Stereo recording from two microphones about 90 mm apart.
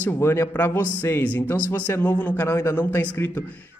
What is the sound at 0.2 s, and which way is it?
Speech, 30° left (ahead or behind).